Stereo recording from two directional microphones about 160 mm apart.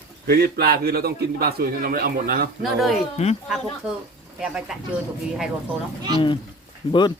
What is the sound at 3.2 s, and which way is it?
Speech, 40° left (ahead or behind).